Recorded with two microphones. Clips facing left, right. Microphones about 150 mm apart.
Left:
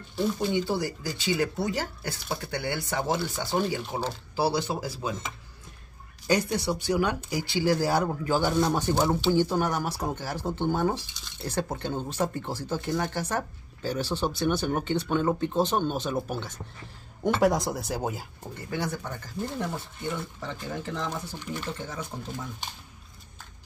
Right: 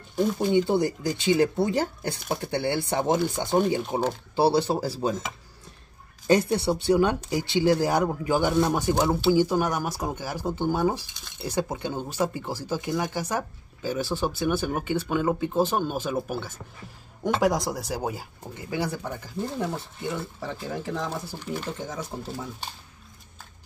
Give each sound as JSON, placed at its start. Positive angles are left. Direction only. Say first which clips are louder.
{"t": 0.4, "sound": "speech", "louder": "right 5 dB", "side_deg": -20}
{"t": 6.2, "sound": "speech", "louder": "right 4 dB", "side_deg": -25}
{"t": 17.6, "sound": "speech", "louder": "right 1 dB", "side_deg": -10}